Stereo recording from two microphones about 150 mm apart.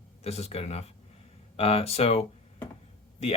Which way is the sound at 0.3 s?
45° left (ahead or behind).